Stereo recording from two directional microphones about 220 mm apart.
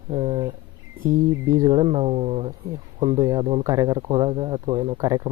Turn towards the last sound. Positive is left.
turn(degrees=-15)  # may be behind; listen again after turning